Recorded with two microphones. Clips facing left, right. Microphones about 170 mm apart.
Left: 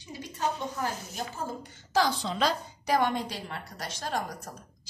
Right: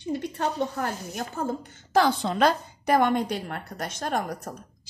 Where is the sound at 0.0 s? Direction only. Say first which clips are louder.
Right 5 dB; 60° right (ahead or behind).